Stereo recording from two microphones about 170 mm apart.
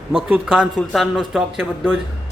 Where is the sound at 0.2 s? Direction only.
5° right (ahead or behind).